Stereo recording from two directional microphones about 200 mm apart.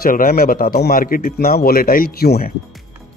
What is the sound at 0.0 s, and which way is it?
Speech, 45° left (ahead or behind).